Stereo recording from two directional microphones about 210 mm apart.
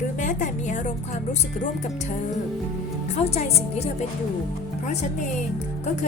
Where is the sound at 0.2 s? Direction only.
35° left (ahead or behind).